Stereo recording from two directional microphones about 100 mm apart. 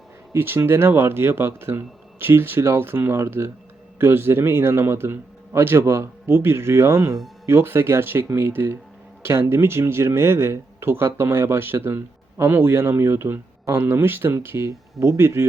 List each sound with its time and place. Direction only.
0.3 s speech: 20° right (ahead or behind)